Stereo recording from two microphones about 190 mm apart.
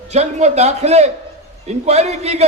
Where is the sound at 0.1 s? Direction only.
35° right (ahead or behind).